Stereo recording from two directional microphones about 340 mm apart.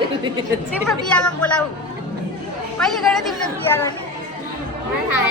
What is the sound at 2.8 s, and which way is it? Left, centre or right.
Speech, centre.